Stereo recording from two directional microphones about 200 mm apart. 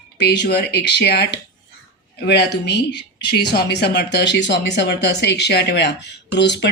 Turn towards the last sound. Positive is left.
turn(degrees=60)  # may be behind; listen again after turning